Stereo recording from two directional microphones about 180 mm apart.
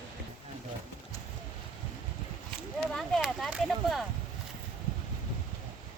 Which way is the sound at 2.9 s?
5° left (ahead or behind).